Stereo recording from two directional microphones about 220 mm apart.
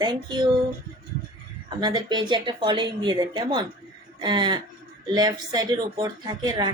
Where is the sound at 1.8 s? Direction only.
20° right (ahead or behind).